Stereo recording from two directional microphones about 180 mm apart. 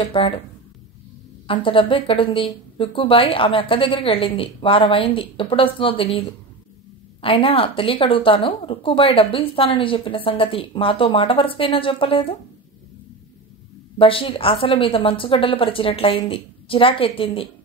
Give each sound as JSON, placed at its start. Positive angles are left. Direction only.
{"t": 0.0, "sound": "speech", "side_deg": 30}
{"t": 1.5, "sound": "speech", "side_deg": 30}
{"t": 7.2, "sound": "speech", "side_deg": 30}
{"t": 13.9, "sound": "speech", "side_deg": 30}